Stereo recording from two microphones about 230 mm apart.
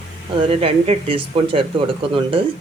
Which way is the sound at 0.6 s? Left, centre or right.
Right.